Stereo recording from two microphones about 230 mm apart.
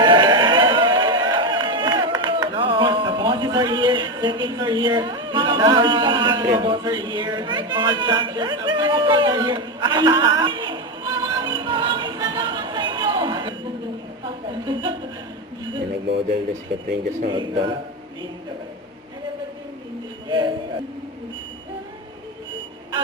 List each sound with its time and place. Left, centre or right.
0.0 s a sound: centre
17.0 s a man's voice: right
17.3 s a man's voice: right
20.2 s music: centre